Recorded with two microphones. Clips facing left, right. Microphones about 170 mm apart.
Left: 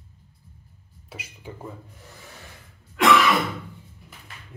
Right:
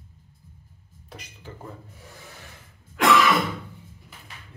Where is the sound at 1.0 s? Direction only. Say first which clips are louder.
Left 2 dB; 5° left (ahead or behind).